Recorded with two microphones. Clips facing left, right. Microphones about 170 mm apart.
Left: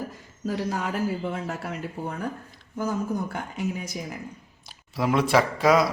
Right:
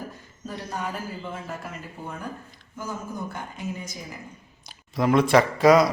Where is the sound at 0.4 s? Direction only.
90° left; by 2.1 s 70° left (ahead or behind).